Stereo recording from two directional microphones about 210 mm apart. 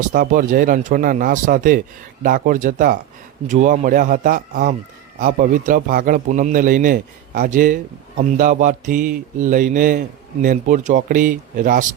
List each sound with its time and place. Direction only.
0.0 s a man's voice: 40° right (ahead or behind)